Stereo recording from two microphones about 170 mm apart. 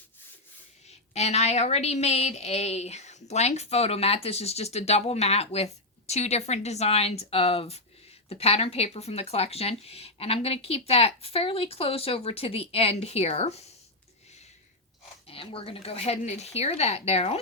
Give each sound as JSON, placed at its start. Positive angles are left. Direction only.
{"t": 0.9, "sound": "a woman's voice", "side_deg": 40}
{"t": 15.3, "sound": "a woman's voice", "side_deg": 35}